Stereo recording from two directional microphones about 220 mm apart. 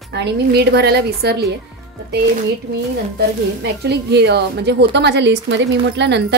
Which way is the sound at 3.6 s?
50° right (ahead or behind).